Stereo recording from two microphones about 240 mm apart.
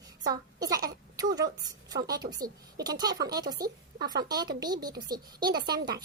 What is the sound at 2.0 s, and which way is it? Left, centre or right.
Speech, centre.